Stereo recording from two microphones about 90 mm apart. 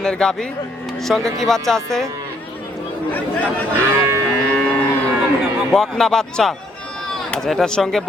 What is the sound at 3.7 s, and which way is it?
Cattle, 30° right (ahead or behind).